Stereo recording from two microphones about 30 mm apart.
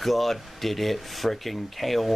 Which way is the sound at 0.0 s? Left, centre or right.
Centre.